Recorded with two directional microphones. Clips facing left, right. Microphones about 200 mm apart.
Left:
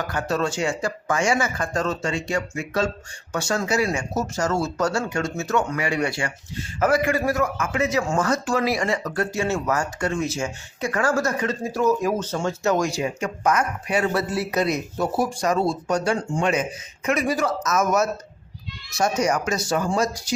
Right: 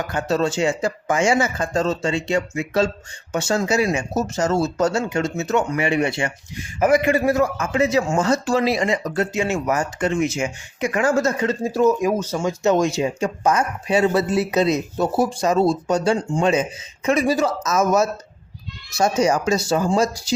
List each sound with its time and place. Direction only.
0.1 s speech: 25° right (ahead or behind)